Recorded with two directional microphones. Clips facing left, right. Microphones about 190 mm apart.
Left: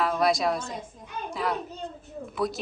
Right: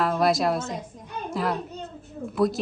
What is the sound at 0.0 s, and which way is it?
A woman's voice, centre (ahead or behind).